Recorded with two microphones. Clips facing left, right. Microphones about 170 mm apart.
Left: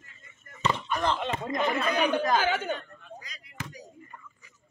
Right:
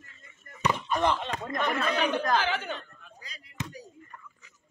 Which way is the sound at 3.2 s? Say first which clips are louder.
Right 2 dB; 30° right (ahead or behind).